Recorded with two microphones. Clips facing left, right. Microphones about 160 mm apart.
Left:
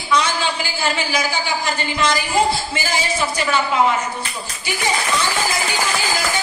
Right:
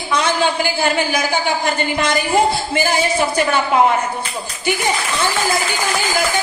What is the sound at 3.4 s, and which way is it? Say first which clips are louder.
Speech: right 2 dB; 55° right (ahead or behind).